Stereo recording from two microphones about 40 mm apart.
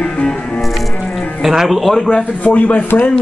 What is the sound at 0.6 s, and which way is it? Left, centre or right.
Music, centre.